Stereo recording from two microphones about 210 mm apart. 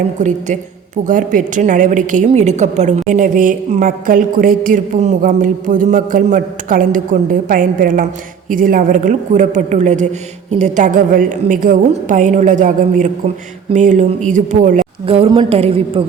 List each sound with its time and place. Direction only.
0.2 s a woman's voice: 35° right (ahead or behind)